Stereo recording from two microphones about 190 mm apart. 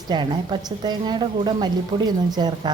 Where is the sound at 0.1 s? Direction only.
25° right (ahead or behind).